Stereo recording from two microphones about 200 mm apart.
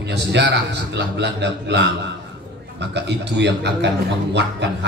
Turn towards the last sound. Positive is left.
turn(degrees=-60)  # may be behind; listen again after turning